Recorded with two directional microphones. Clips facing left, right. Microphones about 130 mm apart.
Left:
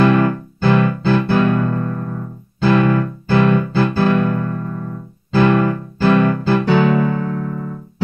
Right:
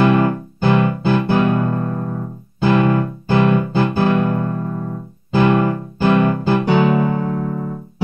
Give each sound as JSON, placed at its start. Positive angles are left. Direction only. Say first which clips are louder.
{"t": 0.0, "sound": "music", "louder": "left 1 dB", "side_deg": -20}
{"t": 5.3, "sound": "electric piano", "louder": "left 1 dB", "side_deg": -20}